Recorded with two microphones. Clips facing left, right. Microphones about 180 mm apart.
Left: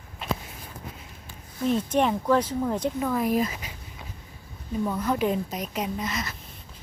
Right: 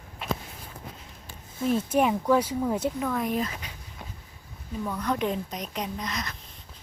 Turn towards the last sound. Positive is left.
turn(degrees=5)  # may be behind; listen again after turning